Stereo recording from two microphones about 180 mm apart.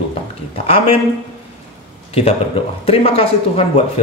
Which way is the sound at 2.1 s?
35° left (ahead or behind).